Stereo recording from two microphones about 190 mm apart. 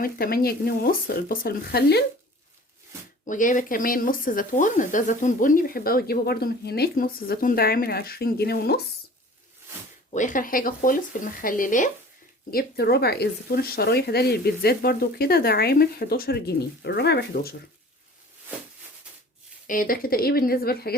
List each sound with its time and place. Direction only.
0.0 s speech: 50° left (ahead or behind)
3.2 s speech: 45° left (ahead or behind)
10.1 s speech: 40° left (ahead or behind); by 17.5 s 60° left (ahead or behind)
19.6 s speech: 45° left (ahead or behind)